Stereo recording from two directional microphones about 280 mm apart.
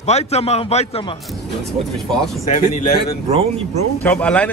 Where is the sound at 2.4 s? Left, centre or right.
Left.